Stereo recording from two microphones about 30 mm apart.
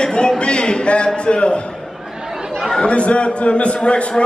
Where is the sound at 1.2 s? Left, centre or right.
Left.